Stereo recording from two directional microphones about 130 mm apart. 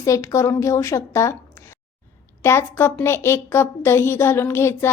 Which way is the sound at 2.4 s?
20° left (ahead or behind).